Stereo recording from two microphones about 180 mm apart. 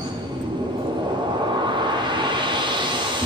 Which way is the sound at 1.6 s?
25° right (ahead or behind).